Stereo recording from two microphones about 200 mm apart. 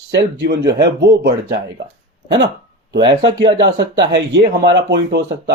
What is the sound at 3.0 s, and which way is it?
Speech, 60° right (ahead or behind).